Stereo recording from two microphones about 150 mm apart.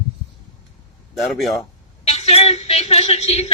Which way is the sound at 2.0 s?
45° left (ahead or behind).